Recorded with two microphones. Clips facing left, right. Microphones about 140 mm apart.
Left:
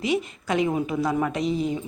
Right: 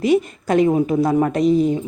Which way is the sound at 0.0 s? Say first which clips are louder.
Right 8 dB; 45° right (ahead or behind).